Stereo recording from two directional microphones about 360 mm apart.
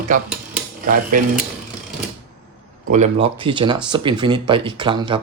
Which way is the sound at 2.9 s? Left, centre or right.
Centre.